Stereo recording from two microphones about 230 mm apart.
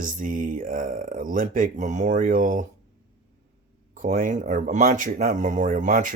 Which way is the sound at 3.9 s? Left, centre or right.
Right.